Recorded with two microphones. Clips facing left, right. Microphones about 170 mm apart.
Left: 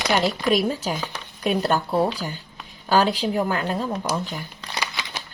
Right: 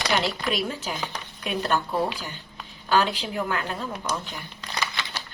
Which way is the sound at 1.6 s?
35° left (ahead or behind).